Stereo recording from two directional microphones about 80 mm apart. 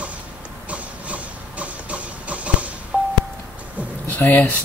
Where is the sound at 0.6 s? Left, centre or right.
Centre.